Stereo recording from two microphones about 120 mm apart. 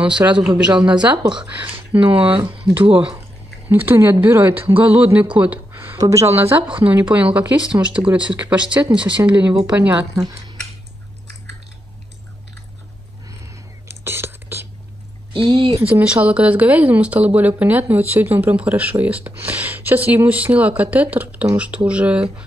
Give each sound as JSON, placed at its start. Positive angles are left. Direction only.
{"t": 0.0, "sound": "speech", "side_deg": -10}
{"t": 1.1, "sound": "speech", "side_deg": -40}
{"t": 1.4, "sound": "speech", "side_deg": -15}
{"t": 2.0, "sound": "speech", "side_deg": -50}
{"t": 2.3, "sound": "speech", "side_deg": -30}
{"t": 2.8, "sound": "speech", "side_deg": -45}
{"t": 3.6, "sound": "speech", "side_deg": -15}
{"t": 5.7, "sound": "a sound", "side_deg": -20}
{"t": 5.9, "sound": "speech", "side_deg": -25}
{"t": 6.9, "sound": "speech", "side_deg": -15}
{"t": 13.8, "sound": "whispering", "side_deg": -20}
{"t": 15.3, "sound": "speech", "side_deg": -45}
{"t": 15.8, "sound": "speech", "side_deg": -10}